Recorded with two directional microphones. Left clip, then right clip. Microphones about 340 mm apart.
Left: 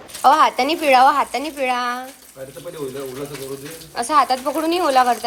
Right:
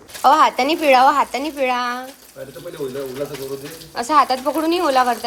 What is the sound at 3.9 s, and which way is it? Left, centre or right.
Speech, centre.